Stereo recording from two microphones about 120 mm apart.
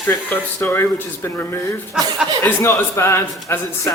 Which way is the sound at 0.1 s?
20° left (ahead or behind).